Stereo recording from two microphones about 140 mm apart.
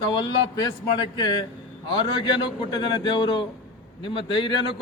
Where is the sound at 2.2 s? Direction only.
30° left (ahead or behind).